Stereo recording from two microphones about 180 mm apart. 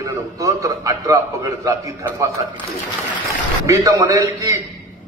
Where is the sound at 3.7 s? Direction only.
20° right (ahead or behind).